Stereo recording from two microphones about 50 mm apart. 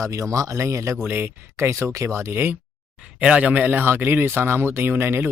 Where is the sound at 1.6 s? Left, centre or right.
Right.